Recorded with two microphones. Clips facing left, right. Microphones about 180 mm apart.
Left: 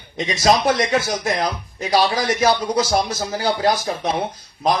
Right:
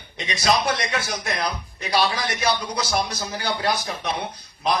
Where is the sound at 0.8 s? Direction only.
25° left (ahead or behind).